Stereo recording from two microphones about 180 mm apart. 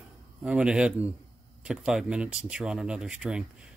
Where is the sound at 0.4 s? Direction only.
5° right (ahead or behind).